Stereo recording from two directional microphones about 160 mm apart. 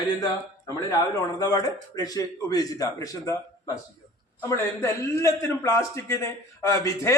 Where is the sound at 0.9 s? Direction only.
25° left (ahead or behind).